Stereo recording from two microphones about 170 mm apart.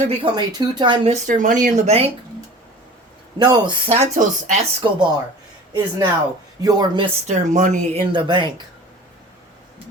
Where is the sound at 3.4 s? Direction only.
25° right (ahead or behind).